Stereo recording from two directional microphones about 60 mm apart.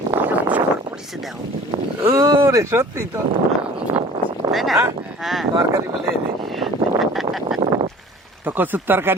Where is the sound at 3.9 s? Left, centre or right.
Right.